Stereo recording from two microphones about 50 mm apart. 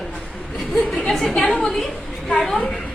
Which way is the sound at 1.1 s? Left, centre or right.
Centre.